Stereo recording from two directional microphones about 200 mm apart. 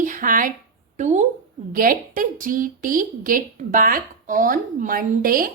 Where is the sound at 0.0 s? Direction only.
40° right (ahead or behind).